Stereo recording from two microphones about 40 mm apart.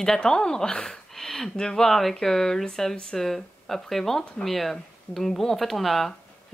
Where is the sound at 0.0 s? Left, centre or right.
Centre.